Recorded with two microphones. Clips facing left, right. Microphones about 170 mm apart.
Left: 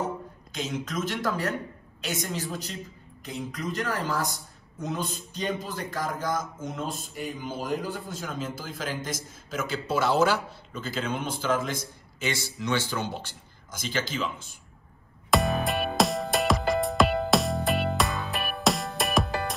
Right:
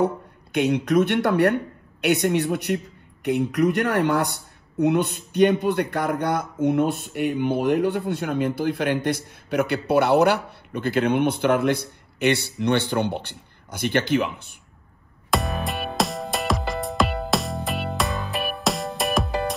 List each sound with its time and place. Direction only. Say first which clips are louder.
0.0 s speech: right 9 dB; 65° right (ahead or behind)
15.3 s music: left 1 dB; centre (ahead or behind)